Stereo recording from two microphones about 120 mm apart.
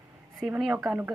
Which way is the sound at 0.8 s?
20° right (ahead or behind).